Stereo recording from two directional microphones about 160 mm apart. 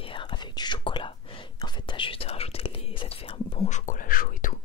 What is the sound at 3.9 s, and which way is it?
Whispering, 60° left (ahead or behind).